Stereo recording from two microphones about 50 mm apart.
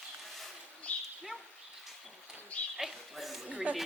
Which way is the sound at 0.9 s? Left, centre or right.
Left.